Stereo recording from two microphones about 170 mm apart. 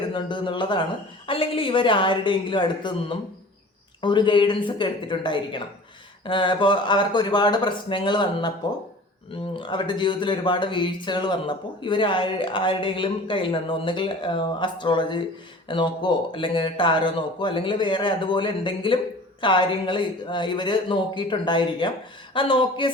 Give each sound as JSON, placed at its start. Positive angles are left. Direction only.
{"t": 0.1, "sound": "speech", "side_deg": 30}
{"t": 9.6, "sound": "speech", "side_deg": 30}